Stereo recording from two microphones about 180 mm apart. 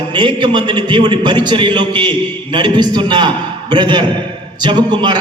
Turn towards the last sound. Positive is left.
turn(degrees=-25)  # may be behind; listen again after turning